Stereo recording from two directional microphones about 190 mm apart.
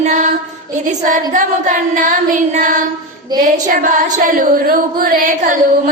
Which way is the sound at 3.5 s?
45° right (ahead or behind).